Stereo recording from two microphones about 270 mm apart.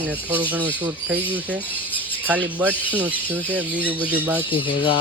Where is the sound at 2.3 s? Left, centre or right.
Centre.